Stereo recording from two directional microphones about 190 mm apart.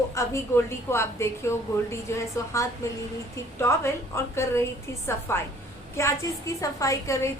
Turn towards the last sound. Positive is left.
turn(degrees=15)  # may be behind; listen again after turning